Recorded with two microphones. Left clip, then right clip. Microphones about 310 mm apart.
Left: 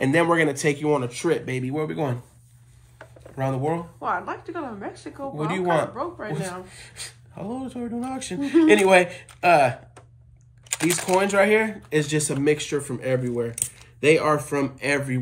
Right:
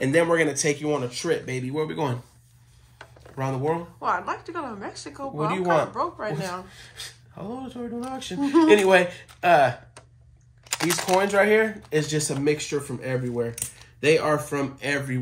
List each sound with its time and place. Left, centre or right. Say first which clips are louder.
0.0 s speech: left 1 dB; centre
0.7 s speech: left 2 dB; left
1.4 s a woman's voice: left 1 dB; centre
3.3 s a woman's voice: left 1 dB; centre
10.8 s a woman's voice: left 1 dB; centre